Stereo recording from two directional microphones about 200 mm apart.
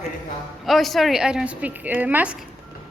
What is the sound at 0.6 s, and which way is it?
A woman's voice, centre (ahead or behind).